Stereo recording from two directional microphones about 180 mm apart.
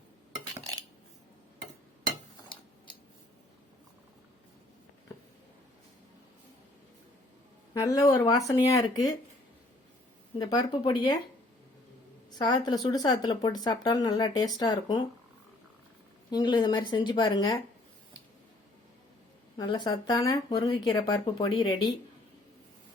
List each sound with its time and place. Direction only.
7.7 s speech: 20° left (ahead or behind)
10.3 s speech: 25° left (ahead or behind)
12.3 s speech: 25° left (ahead or behind)
16.3 s speech: 25° left (ahead or behind)
19.5 s speech: 25° left (ahead or behind)